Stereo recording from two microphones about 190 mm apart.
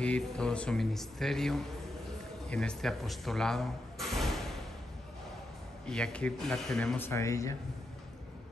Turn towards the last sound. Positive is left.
turn(degrees=15)  # may be behind; listen again after turning